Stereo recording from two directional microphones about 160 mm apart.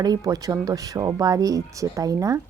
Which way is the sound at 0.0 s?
25° right (ahead or behind).